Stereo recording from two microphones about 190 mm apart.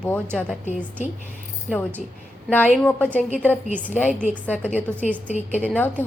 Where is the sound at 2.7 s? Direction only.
5° left (ahead or behind).